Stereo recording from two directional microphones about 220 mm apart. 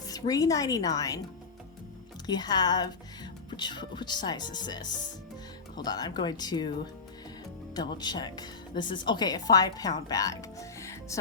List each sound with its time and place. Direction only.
0.1 s speech: 15° left (ahead or behind)
2.2 s speech: 20° left (ahead or behind)
7.9 s speech: 20° left (ahead or behind)
10.1 s music: 15° left (ahead or behind)